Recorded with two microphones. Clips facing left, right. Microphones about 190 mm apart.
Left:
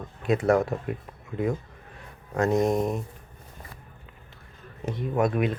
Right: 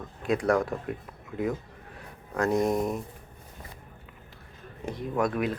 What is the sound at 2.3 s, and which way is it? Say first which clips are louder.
Speech: left 2 dB; 20° left (ahead or behind).